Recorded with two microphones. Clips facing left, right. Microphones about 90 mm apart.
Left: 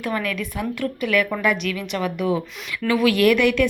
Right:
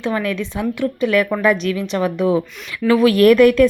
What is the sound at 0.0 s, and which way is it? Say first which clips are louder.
A woman's voice: right 4 dB; 25° right (ahead or behind).